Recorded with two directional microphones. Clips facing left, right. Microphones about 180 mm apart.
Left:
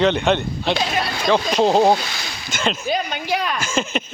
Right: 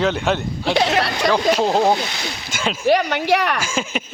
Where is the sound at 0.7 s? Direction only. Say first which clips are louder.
Right 5 dB; 70° right (ahead or behind).